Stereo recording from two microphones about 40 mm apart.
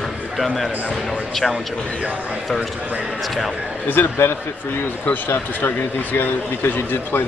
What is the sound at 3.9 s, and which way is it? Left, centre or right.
Speech, left.